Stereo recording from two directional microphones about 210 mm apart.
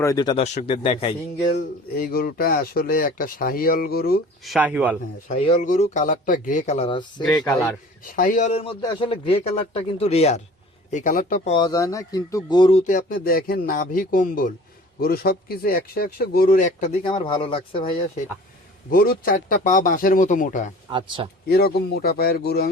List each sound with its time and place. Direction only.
0.0 s speech: 15° left (ahead or behind)
0.4 s speech: 30° left (ahead or behind)
1.5 s speech: 45° left (ahead or behind)
4.4 s speech: centre (ahead or behind)
5.3 s speech: 30° left (ahead or behind)
8.0 s speech: 40° left (ahead or behind)
11.5 s speech: 20° left (ahead or behind)
12.8 s speech: 40° left (ahead or behind)
17.1 s speech: 25° left (ahead or behind)
18.9 s speech: 45° left (ahead or behind)
20.9 s speech: 20° right (ahead or behind)
21.4 s speech: 50° left (ahead or behind)